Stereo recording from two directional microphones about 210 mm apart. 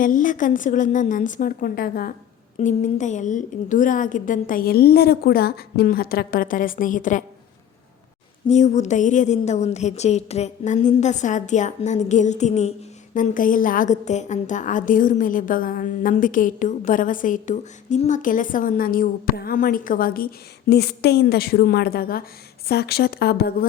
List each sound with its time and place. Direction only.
0.0 s a woman's voice: 40° left (ahead or behind)
8.4 s a woman's voice: 35° left (ahead or behind)